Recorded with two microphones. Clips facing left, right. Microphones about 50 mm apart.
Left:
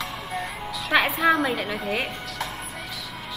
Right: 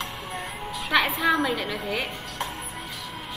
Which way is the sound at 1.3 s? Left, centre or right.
Centre.